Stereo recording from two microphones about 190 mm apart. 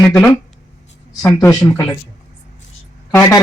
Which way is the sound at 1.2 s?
15° left (ahead or behind).